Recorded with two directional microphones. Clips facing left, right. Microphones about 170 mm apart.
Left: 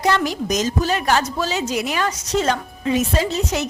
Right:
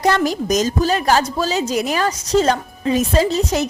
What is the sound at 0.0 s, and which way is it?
A woman's voice, 40° right (ahead or behind).